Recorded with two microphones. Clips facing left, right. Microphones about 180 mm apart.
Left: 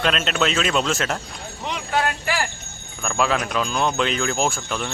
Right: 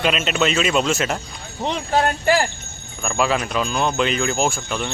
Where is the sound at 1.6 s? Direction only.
30° right (ahead or behind).